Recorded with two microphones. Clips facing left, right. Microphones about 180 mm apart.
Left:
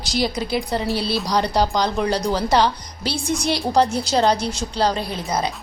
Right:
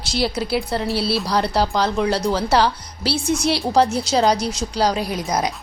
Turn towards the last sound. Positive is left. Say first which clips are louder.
# right 2 dB
turn(degrees=-15)  # may be behind; listen again after turning